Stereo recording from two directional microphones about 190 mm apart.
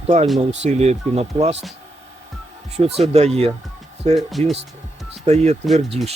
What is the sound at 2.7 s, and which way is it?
Speech, 35° right (ahead or behind).